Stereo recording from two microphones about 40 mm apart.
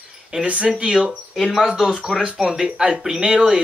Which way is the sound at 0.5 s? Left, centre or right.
Right.